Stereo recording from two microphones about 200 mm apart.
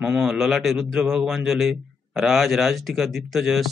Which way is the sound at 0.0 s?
Centre (ahead or behind).